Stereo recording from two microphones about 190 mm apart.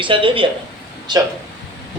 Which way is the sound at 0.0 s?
25° right (ahead or behind).